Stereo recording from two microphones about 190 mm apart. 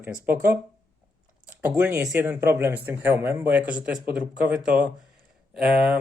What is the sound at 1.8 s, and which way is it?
Speech, 10° right (ahead or behind).